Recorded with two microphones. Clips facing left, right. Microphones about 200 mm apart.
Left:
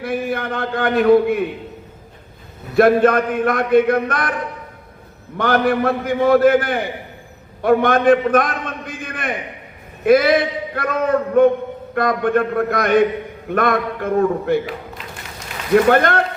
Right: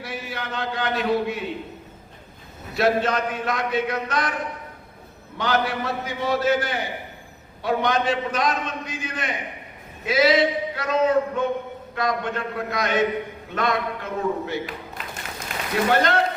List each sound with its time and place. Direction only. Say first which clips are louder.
0.0 s a man's voice: left 10 dB; 55° left (ahead or behind)
2.7 s a man's voice: left 9 dB; 55° left (ahead or behind)
5.4 s a man's voice: left 7 dB; 55° left (ahead or behind)
15.9 s a man's voice: left 5 dB; 55° left (ahead or behind)